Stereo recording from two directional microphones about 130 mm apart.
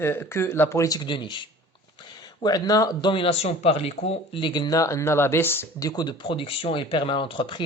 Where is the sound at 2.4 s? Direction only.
30° left (ahead or behind).